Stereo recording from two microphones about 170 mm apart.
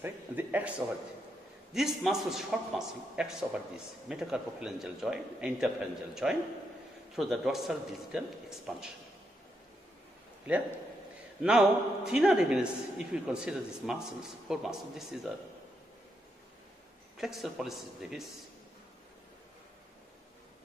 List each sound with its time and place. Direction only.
0.0 s a man's voice: 10° right (ahead or behind)
10.5 s a man's voice: 5° right (ahead or behind)
17.2 s a man's voice: centre (ahead or behind)